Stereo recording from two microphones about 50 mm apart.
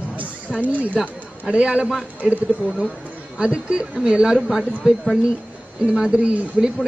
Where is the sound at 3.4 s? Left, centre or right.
Centre.